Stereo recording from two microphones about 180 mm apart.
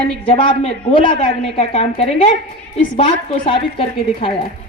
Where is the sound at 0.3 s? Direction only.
30° left (ahead or behind).